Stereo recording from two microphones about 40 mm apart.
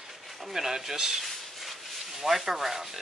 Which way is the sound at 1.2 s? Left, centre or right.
Centre.